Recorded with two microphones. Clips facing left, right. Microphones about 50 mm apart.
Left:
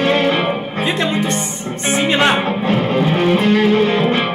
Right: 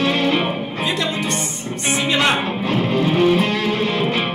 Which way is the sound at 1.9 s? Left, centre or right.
Left.